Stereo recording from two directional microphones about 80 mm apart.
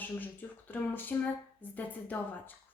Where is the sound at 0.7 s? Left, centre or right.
Left.